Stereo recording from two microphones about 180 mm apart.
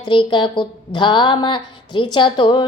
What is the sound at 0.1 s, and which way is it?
A woman's voice, 25° left (ahead or behind).